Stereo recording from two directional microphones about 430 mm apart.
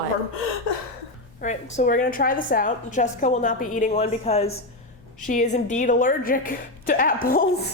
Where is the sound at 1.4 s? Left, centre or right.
Centre.